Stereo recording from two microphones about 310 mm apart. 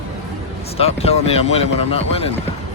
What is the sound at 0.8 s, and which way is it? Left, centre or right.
Speech, centre.